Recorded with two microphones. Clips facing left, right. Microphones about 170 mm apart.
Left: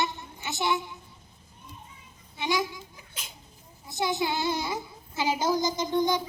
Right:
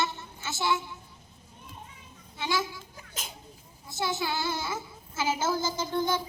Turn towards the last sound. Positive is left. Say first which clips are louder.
# left 3 dB
turn(degrees=15)  # may be behind; listen again after turning